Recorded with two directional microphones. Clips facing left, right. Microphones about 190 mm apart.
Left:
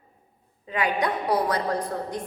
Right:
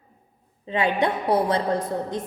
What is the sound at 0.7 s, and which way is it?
Mantra, 25° right (ahead or behind).